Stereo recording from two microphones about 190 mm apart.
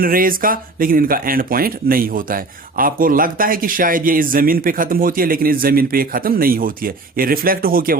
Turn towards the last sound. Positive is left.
turn(degrees=-50)  # may be behind; listen again after turning